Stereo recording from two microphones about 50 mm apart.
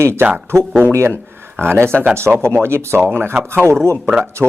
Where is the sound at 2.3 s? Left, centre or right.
Centre.